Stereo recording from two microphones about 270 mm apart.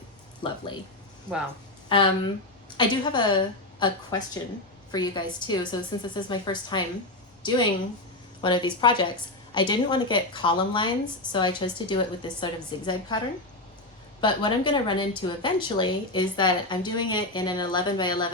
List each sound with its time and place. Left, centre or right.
0.4 s a woman's voice: centre
1.9 s a woman's voice: centre
14.2 s a woman's voice: centre